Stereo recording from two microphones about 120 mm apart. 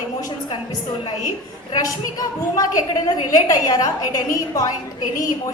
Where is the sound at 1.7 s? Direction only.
30° left (ahead or behind).